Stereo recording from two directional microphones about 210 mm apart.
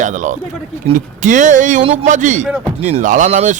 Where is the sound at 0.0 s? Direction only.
35° right (ahead or behind).